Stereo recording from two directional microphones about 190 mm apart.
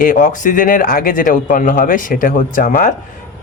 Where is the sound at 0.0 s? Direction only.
45° left (ahead or behind).